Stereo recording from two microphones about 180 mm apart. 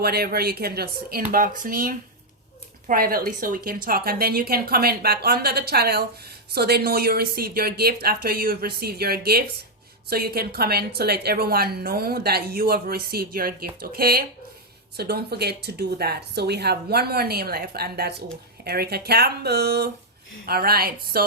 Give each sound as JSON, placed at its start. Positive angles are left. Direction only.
{"t": 0.0, "sound": "a woman's voice", "side_deg": -60}